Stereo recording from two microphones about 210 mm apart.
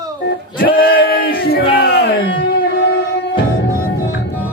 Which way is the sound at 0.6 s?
45° left (ahead or behind).